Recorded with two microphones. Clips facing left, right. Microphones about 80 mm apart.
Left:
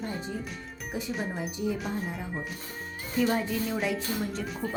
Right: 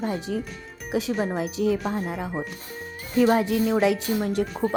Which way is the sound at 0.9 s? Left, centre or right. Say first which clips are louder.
Right 9 dB; right.